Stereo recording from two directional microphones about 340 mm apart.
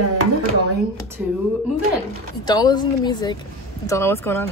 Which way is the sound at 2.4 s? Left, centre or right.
Centre.